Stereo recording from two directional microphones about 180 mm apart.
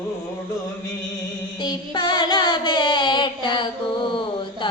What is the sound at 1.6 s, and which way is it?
Child singing, 25° left (ahead or behind).